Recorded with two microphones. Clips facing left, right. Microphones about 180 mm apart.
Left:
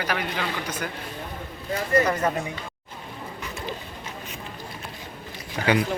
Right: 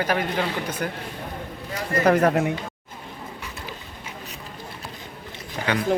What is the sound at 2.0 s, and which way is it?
Speech, 60° right (ahead or behind).